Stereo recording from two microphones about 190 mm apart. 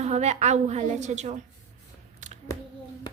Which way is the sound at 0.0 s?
35° right (ahead or behind).